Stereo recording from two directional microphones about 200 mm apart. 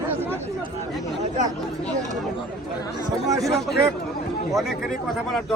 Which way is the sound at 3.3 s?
15° right (ahead or behind).